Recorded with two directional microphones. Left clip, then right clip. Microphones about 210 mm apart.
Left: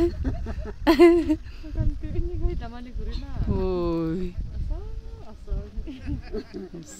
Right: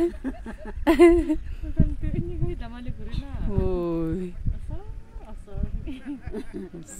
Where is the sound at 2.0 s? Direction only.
45° right (ahead or behind).